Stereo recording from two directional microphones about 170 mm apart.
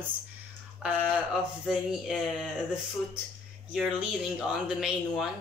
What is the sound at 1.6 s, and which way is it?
Speech, 5° right (ahead or behind).